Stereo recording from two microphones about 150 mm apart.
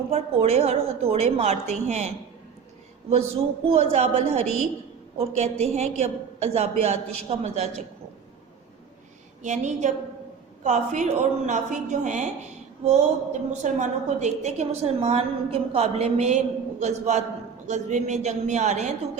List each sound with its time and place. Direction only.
0.1 s a woman's voice: 45° right (ahead or behind)
9.4 s a woman's voice: 55° right (ahead or behind)